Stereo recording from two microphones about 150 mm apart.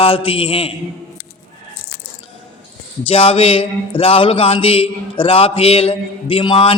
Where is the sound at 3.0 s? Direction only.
40° left (ahead or behind).